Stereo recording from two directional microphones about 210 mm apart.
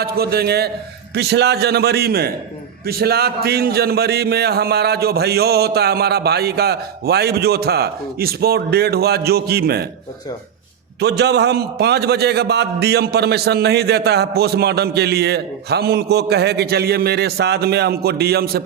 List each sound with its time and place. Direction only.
0.0 s a man's voice: 50° right (ahead or behind)
11.0 s a man's voice: 55° right (ahead or behind)